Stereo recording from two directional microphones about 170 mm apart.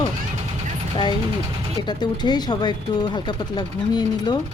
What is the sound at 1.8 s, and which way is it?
Speech, 25° left (ahead or behind).